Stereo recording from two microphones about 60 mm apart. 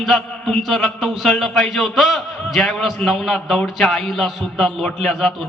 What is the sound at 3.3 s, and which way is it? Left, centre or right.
Speech, centre.